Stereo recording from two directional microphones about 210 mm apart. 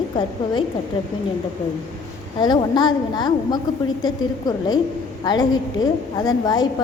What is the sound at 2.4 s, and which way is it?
A woman's voice, 20° left (ahead or behind).